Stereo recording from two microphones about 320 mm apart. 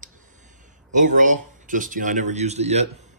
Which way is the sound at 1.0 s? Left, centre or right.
Right.